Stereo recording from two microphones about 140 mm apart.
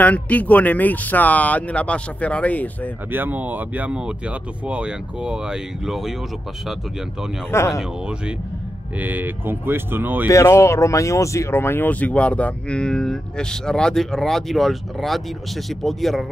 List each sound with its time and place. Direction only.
0.0 s speech: 10° left (ahead or behind)
3.1 s speech: 15° right (ahead or behind)
7.5 s speech: 20° left (ahead or behind)
9.0 s speech: 15° right (ahead or behind)
10.2 s speech: 20° left (ahead or behind); by 16.3 s centre (ahead or behind)